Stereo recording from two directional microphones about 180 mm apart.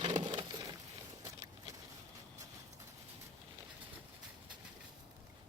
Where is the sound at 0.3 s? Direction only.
25° right (ahead or behind).